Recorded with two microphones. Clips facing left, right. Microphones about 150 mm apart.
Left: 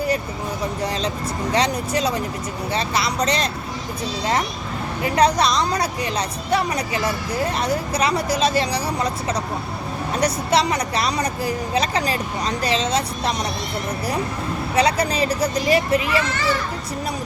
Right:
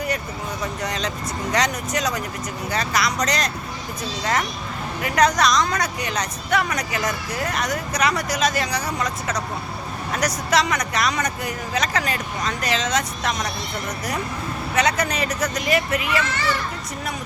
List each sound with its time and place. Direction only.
0.8 s speech: 30° left (ahead or behind)
5.0 s speech: 30° left (ahead or behind)
14.8 s speech: 30° left (ahead or behind)